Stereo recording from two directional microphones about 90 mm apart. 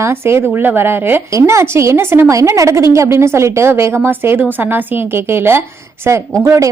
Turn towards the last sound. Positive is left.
turn(degrees=-35)  # may be behind; listen again after turning